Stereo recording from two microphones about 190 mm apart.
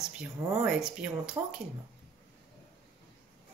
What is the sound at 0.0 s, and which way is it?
Speech, 5° right (ahead or behind).